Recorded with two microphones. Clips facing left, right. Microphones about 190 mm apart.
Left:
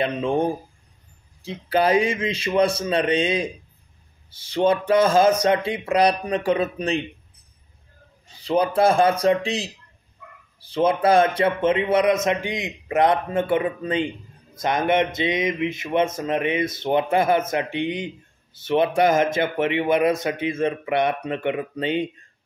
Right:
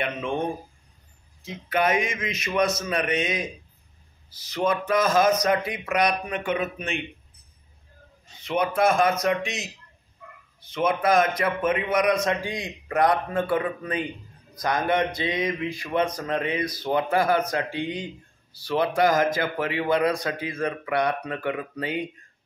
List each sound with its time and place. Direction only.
0.0 s a man's voice: 30° left (ahead or behind)
8.4 s a man's voice: 30° left (ahead or behind)